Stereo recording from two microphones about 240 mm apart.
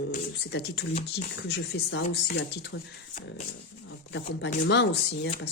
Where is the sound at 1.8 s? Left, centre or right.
Left.